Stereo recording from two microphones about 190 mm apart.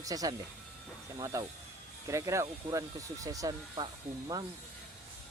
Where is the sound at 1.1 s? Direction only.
15° right (ahead or behind).